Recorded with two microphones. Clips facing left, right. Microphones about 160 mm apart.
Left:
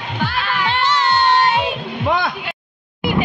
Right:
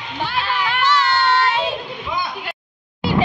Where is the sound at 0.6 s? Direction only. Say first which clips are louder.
Left 1 dB; 25° left (ahead or behind).